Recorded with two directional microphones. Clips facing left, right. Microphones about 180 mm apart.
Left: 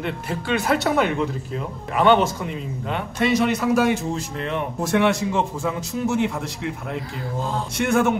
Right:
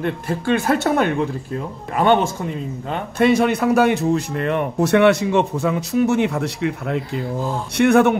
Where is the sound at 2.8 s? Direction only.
45° right (ahead or behind).